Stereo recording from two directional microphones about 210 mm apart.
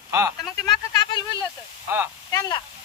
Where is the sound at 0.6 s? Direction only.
20° left (ahead or behind).